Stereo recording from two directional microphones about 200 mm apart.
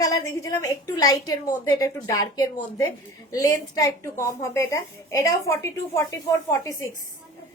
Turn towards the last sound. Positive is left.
turn(degrees=15)  # may be behind; listen again after turning